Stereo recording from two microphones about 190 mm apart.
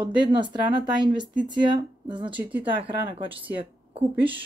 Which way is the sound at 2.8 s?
25° right (ahead or behind).